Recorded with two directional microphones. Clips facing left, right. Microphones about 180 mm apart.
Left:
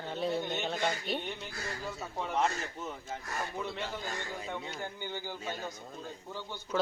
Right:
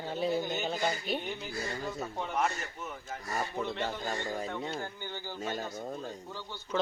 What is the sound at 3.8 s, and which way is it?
Speech, 40° right (ahead or behind).